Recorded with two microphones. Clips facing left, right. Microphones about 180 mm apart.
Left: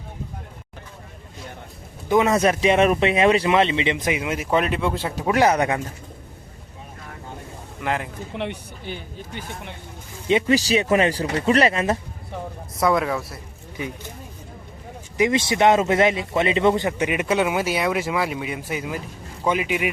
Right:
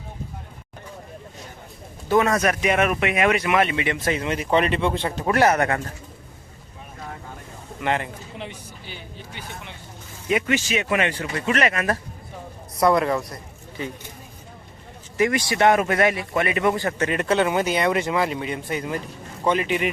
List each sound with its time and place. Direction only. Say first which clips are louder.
2.0 s speech: left 2 dB; 20° left (ahead or behind)
7.8 s a man's voice: right 1 dB; centre (ahead or behind)
8.4 s speech: left 9 dB; 60° left (ahead or behind)
10.2 s speech: left 4 dB; 30° left (ahead or behind)
12.7 s speech: right 2 dB; centre (ahead or behind)
15.2 s a man's voice: left 1 dB; 20° left (ahead or behind)